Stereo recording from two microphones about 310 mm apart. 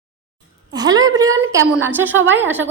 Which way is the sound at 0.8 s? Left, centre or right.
Centre.